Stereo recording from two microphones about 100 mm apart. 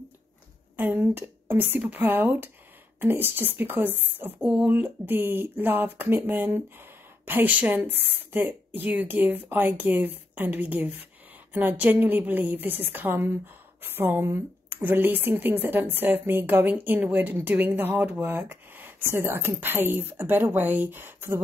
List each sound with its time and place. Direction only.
0.7 s a woman's voice: 20° right (ahead or behind)